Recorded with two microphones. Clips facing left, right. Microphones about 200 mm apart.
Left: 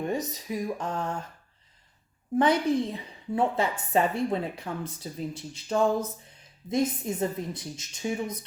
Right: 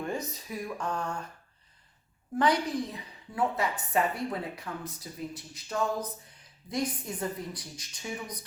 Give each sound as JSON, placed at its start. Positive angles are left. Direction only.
{"t": 0.0, "sound": "a woman's voice", "side_deg": 20}
{"t": 2.4, "sound": "a woman's voice", "side_deg": 25}